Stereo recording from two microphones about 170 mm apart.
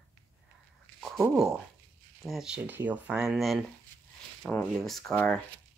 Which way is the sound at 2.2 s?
Centre (ahead or behind).